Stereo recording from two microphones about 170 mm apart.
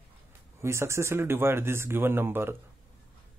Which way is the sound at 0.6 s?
15° right (ahead or behind).